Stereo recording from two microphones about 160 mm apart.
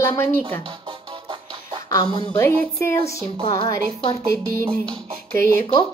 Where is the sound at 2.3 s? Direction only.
10° left (ahead or behind).